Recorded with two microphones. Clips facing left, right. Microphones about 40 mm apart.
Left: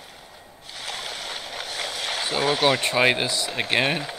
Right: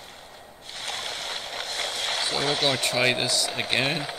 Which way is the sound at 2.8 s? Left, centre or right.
Centre.